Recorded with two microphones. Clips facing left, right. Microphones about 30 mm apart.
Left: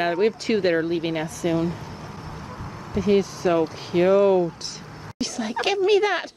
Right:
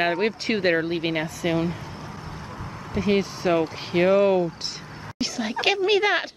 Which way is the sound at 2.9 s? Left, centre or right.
Right.